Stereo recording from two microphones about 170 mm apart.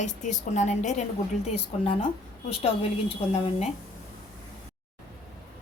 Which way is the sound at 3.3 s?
40° left (ahead or behind).